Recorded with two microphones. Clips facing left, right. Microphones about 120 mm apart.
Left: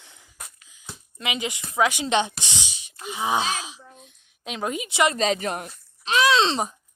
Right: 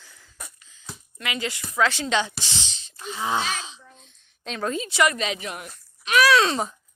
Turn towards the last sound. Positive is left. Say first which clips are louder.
# right 1 dB
turn(degrees=25)  # may be behind; listen again after turning